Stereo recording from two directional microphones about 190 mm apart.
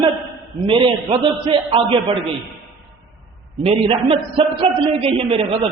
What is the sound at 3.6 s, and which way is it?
A man's voice, 30° right (ahead or behind).